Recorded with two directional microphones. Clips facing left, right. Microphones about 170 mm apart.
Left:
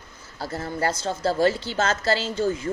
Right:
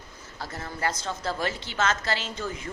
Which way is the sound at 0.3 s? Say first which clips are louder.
Left 7 dB; 30° left (ahead or behind).